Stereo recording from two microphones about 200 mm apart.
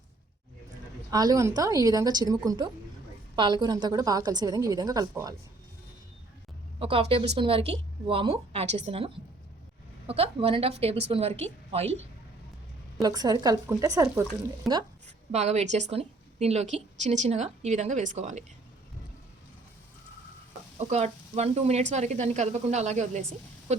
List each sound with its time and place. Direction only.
1.1 s a woman's voice: 20° right (ahead or behind)
6.7 s a woman's voice: 30° right (ahead or behind)
13.0 s a woman's voice: 20° right (ahead or behind)
15.0 s a woman's voice: 35° right (ahead or behind)
20.7 s a woman's voice: 35° right (ahead or behind)